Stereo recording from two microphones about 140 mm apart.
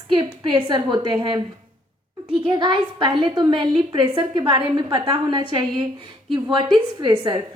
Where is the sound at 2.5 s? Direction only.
30° right (ahead or behind).